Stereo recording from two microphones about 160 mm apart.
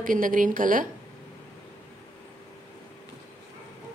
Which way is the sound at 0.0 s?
55° right (ahead or behind).